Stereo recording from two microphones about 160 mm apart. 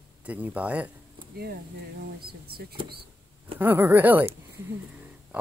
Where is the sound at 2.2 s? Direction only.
75° right (ahead or behind).